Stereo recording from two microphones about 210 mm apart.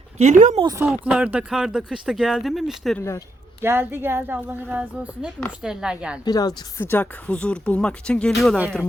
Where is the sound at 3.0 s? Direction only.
10° left (ahead or behind).